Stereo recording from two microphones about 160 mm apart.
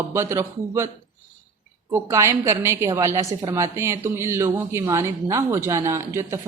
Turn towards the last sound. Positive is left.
turn(degrees=-20)  # may be behind; listen again after turning